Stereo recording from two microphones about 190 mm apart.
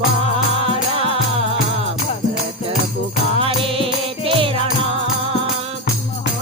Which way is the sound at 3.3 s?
30° right (ahead or behind).